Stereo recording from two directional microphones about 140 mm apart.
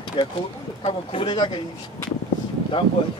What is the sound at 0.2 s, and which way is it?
Speech, 40° left (ahead or behind).